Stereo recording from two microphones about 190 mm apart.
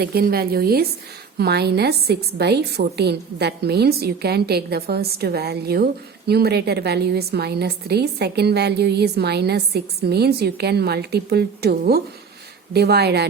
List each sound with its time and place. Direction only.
0.0 s a woman's voice: 55° right (ahead or behind)